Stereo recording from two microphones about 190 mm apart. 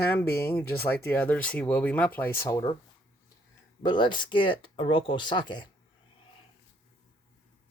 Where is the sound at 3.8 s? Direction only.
25° left (ahead or behind).